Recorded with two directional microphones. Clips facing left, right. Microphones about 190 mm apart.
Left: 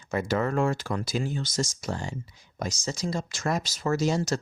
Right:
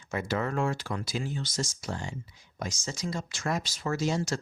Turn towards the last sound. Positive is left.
turn(degrees=40)  # may be behind; listen again after turning